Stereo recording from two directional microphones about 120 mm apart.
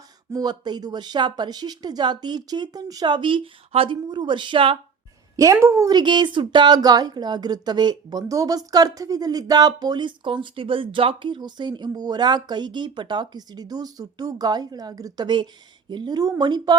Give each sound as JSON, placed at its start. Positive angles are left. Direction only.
{"t": 0.3, "sound": "a woman's voice", "side_deg": -30}
{"t": 5.4, "sound": "a woman's voice", "side_deg": -25}